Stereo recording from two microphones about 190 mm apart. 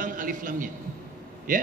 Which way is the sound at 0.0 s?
45° right (ahead or behind).